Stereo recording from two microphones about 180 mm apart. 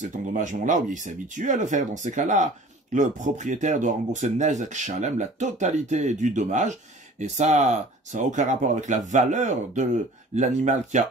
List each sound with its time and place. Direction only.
0.0 s speech: 45° right (ahead or behind)